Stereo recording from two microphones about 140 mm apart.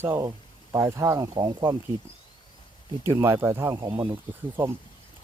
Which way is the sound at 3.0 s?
20° right (ahead or behind).